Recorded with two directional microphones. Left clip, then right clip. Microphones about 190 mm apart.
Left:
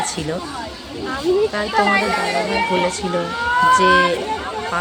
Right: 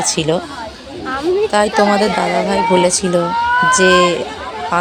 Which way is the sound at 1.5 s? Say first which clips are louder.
Right 4 dB; 40° right (ahead or behind).